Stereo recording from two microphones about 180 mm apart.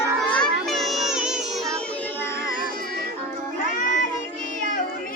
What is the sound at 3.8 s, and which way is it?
Child singing, 45° left (ahead or behind).